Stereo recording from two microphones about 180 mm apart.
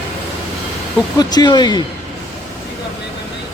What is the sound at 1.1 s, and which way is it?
Speech, 25° left (ahead or behind).